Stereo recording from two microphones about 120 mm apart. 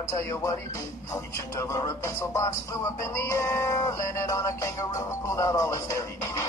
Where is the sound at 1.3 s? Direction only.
30° left (ahead or behind).